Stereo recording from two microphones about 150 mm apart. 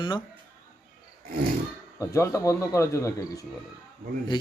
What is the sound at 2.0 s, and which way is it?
A man's voice, 20° left (ahead or behind).